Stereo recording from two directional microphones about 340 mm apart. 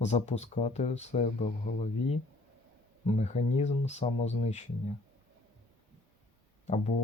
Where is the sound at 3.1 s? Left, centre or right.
Centre.